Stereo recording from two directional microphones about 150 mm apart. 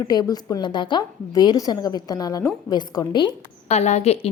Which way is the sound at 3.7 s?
50° left (ahead or behind).